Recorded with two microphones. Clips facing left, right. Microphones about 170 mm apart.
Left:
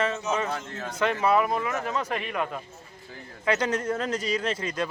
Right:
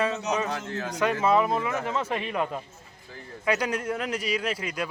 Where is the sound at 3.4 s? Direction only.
10° right (ahead or behind).